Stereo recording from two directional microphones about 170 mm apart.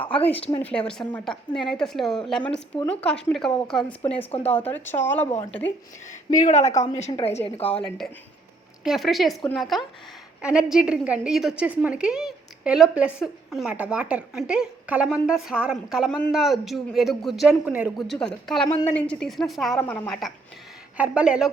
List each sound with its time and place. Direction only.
0.3 s a woman's voice: 35° left (ahead or behind)
0.6 s a woman's voice: 5° left (ahead or behind)
6.1 s a woman's voice: 45° left (ahead or behind)
7.8 s a woman's voice: centre (ahead or behind)